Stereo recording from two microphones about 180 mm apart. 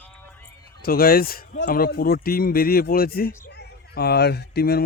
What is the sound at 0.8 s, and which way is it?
Speech, 55° left (ahead or behind).